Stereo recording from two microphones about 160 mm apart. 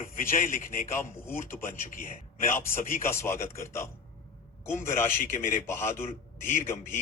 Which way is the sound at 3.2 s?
15° left (ahead or behind).